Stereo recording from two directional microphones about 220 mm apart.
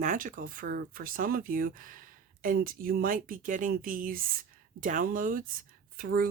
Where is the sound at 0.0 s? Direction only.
35° right (ahead or behind).